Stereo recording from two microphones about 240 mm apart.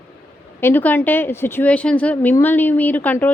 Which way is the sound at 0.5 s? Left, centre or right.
Centre.